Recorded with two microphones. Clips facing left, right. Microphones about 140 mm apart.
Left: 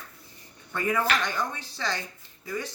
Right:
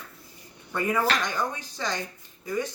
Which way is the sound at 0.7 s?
15° right (ahead or behind).